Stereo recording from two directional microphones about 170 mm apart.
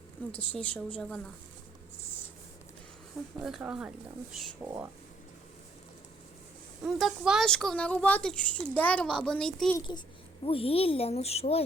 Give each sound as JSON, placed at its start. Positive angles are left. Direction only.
{"t": 0.5, "sound": "a woman's voice", "side_deg": 5}
{"t": 3.3, "sound": "speech", "side_deg": -5}
{"t": 6.8, "sound": "speech", "side_deg": 0}
{"t": 10.4, "sound": "speech", "side_deg": 35}